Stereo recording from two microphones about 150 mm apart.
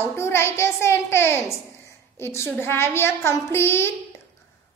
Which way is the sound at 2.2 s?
15° left (ahead or behind).